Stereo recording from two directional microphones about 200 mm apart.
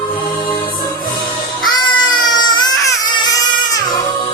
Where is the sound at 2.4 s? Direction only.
20° left (ahead or behind).